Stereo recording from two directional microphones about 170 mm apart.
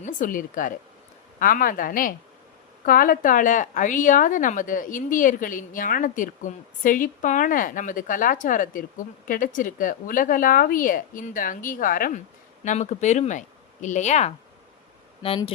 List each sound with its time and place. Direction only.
0.0 s a woman's voice: 50° left (ahead or behind)
12.6 s a woman's voice: 45° left (ahead or behind)